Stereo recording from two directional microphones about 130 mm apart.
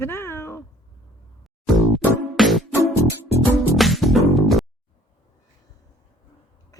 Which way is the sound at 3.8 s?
Centre (ahead or behind).